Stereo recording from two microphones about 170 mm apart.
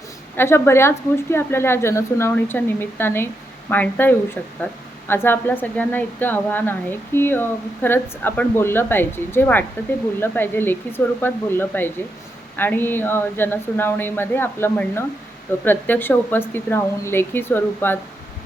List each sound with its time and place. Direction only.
0.3 s a woman's voice: 15° left (ahead or behind)